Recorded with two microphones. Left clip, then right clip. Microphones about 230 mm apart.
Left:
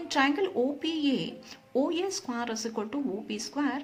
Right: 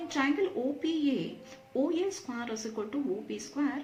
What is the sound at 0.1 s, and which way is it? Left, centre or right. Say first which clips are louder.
Speech: left 4 dB; left.